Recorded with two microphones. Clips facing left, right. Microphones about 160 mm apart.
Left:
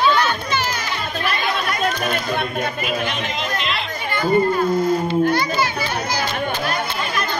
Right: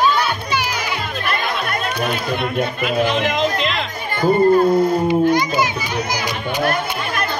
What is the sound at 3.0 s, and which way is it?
Speech, 90° right.